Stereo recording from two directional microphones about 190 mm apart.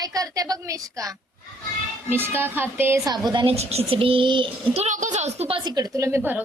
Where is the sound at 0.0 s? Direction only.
20° right (ahead or behind).